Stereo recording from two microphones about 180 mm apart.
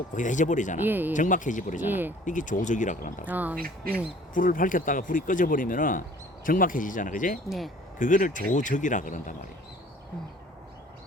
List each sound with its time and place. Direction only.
0.1 s speech: 45° left (ahead or behind)
0.8 s speech: 10° right (ahead or behind)
1.1 s speech: 45° left (ahead or behind)
1.8 s speech: 10° right (ahead or behind)
2.2 s speech: 45° left (ahead or behind)
3.2 s speech: 10° right (ahead or behind)
4.4 s speech: 50° left (ahead or behind)